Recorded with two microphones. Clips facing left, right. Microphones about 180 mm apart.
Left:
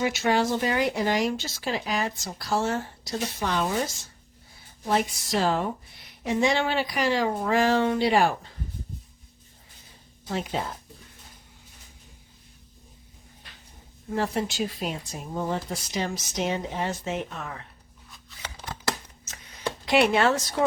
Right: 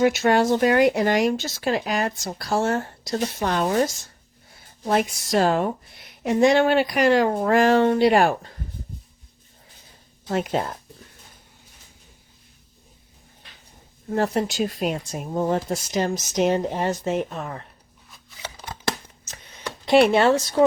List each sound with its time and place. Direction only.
0.0 s a woman's voice: 55° right (ahead or behind)
4.9 s a woman's voice: 55° right (ahead or behind)
10.2 s a woman's voice: 50° right (ahead or behind)
14.1 s a woman's voice: 45° right (ahead or behind)
14.8 s speech: 60° right (ahead or behind)
15.4 s a woman's voice: 45° right (ahead or behind)
19.9 s speech: 30° right (ahead or behind)